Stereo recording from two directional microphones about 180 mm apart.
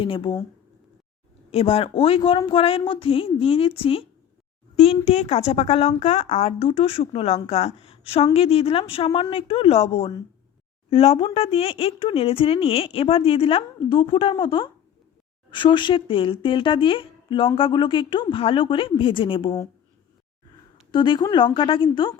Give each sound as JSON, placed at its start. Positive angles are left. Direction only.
{"t": 0.0, "sound": "a woman's voice", "side_deg": 30}
{"t": 1.5, "sound": "a woman's voice", "side_deg": 35}
{"t": 20.9, "sound": "a woman's voice", "side_deg": 25}